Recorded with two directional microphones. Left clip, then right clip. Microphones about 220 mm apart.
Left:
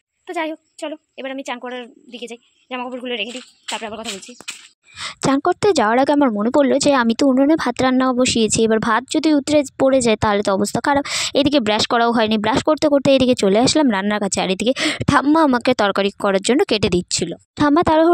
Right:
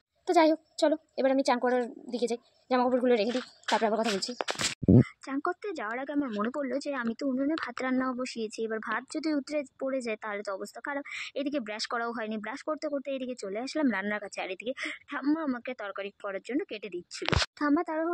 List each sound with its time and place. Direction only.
0.8 s a woman's voice: 15° left (ahead or behind)
5.0 s speech: 55° left (ahead or behind)